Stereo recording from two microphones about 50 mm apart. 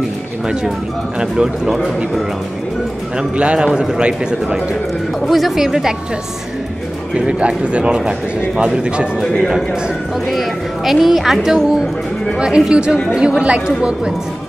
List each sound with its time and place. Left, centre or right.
1.3 s a man's voice: centre
3.2 s a man's voice: centre
5.2 s a man's voice: centre
7.2 s a man's voice: right
10.3 s speech: centre
12.4 s a man's voice: centre